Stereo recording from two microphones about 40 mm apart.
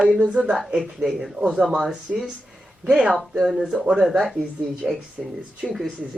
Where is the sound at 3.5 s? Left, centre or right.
Centre.